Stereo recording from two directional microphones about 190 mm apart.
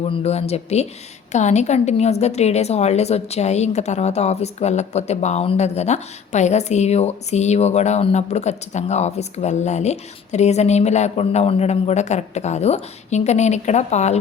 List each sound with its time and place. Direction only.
0.1 s a woman's voice: 35° left (ahead or behind)